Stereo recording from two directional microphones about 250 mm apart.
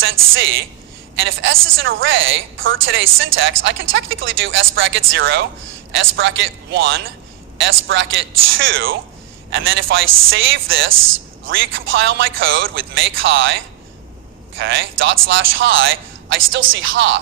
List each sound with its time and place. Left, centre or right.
1.1 s a man's voice: right